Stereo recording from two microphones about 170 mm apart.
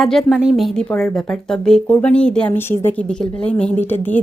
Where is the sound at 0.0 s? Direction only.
Centre (ahead or behind).